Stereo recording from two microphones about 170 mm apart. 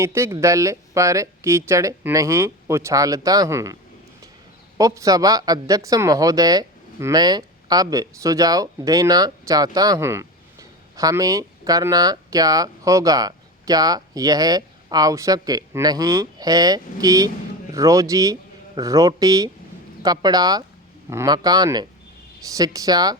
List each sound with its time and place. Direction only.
0.0 s speech: 15° right (ahead or behind)
4.8 s speech: 20° right (ahead or behind)